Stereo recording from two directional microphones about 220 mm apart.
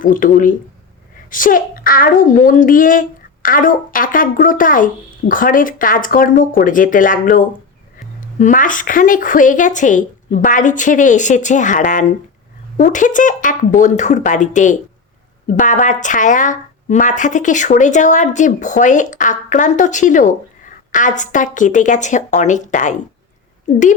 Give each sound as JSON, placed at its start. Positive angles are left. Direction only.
{"t": 0.0, "sound": "speech", "side_deg": 40}